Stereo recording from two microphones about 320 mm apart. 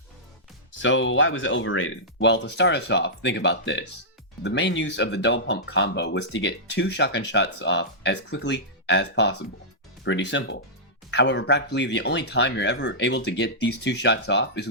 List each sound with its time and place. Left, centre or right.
0.7 s speech: left